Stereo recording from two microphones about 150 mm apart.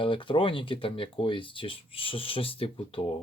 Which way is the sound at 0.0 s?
35° left (ahead or behind).